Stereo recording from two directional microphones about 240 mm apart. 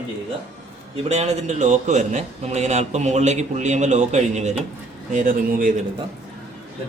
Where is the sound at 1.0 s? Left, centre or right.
Right.